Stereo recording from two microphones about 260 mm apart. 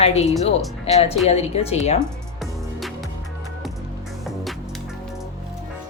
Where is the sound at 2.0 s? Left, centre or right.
Centre.